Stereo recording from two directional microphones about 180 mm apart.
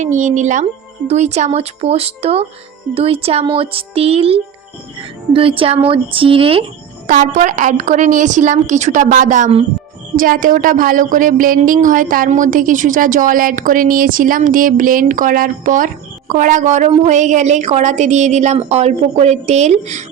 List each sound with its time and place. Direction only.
0.0 s a woman's voice: 45° right (ahead or behind)
7.1 s speech: 45° right (ahead or behind)
10.2 s a woman's voice: 50° right (ahead or behind)